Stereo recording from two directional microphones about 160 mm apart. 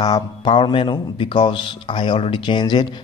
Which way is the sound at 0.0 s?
30° left (ahead or behind).